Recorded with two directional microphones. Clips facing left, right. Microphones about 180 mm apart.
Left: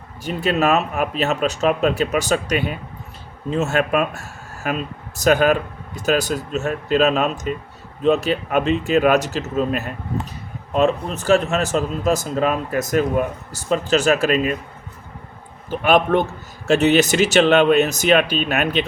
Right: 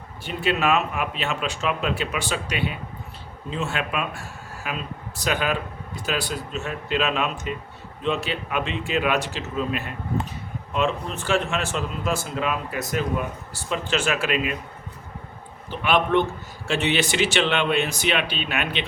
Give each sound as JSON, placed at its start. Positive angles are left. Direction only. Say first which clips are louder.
{"t": 0.3, "sound": "speech", "louder": "left 4 dB", "side_deg": 40}
{"t": 15.7, "sound": "speech", "louder": "left 5 dB", "side_deg": 45}